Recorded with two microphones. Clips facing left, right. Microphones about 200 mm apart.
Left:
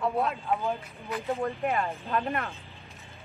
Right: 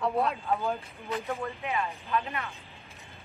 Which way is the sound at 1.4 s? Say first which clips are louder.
Left 4 dB; 50° left (ahead or behind).